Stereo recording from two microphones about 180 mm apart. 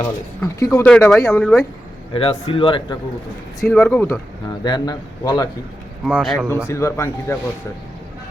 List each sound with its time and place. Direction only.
0.0 s speech: 20° left (ahead or behind)
0.9 s speech: 5° left (ahead or behind)
2.1 s a man's voice: 30° left (ahead or behind)
3.8 s a man's voice: 10° left (ahead or behind)
6.1 s speech: 5° right (ahead or behind)
6.7 s speech: 15° left (ahead or behind)